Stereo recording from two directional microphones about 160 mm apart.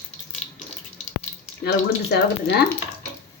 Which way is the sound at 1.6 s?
90° left.